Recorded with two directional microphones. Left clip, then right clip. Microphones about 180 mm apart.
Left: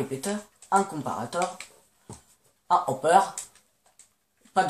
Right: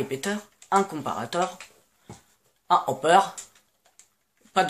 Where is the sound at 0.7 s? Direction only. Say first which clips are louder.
Right 1 dB; 25° right (ahead or behind).